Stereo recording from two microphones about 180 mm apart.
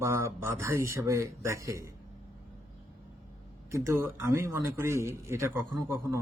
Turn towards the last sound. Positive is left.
turn(degrees=-15)  # may be behind; listen again after turning